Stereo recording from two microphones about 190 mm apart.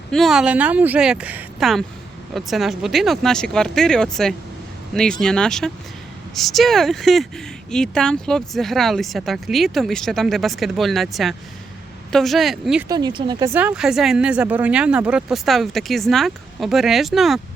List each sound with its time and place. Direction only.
0.1 s speech: centre (ahead or behind)
12.9 s speech: 20° right (ahead or behind)
13.5 s speech: 10° right (ahead or behind)